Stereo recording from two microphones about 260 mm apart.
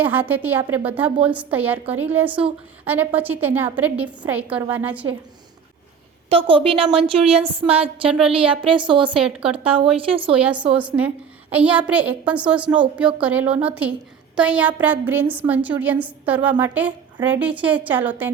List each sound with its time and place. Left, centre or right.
0.0 s a woman's voice: centre
6.2 s a woman's voice: right
9.1 s a woman's voice: centre
9.7 s a woman's voice: right
10.3 s a woman's voice: centre